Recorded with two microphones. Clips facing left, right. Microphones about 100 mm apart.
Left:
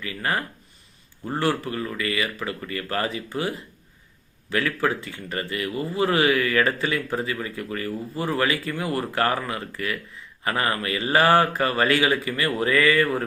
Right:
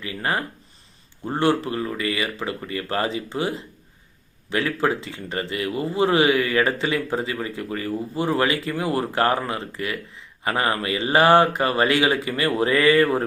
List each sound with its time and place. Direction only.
0.0 s speech: 25° right (ahead or behind)